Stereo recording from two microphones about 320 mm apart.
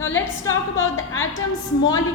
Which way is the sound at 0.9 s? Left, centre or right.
Left.